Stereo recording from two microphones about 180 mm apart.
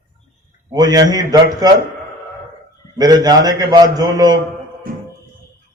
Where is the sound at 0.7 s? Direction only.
20° right (ahead or behind).